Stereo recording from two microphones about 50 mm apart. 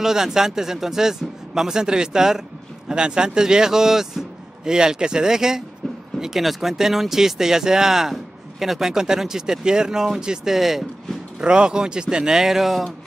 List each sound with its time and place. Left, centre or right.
0.0 s speech: centre
11.4 s speech: centre